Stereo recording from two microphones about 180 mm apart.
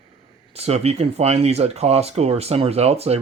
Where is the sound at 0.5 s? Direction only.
35° right (ahead or behind).